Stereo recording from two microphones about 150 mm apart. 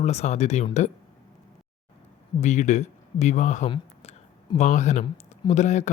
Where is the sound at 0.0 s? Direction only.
45° left (ahead or behind).